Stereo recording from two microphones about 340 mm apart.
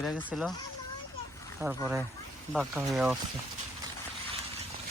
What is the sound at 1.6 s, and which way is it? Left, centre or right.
Speech, centre.